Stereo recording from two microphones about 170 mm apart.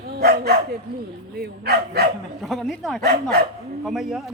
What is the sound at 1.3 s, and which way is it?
Speech, 65° right (ahead or behind).